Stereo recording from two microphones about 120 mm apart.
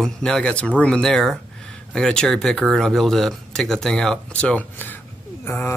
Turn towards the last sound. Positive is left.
turn(degrees=20)  # may be behind; listen again after turning